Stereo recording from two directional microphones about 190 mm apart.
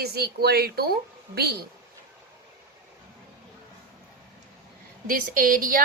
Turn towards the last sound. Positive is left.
turn(degrees=-50)  # may be behind; listen again after turning